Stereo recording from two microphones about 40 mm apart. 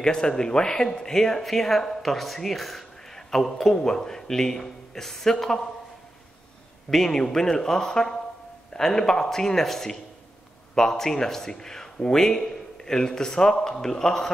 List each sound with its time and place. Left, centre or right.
0.0 s a man's voice: centre
6.9 s a man's voice: centre